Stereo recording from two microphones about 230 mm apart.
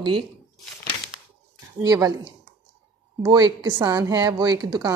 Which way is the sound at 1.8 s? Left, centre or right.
Centre.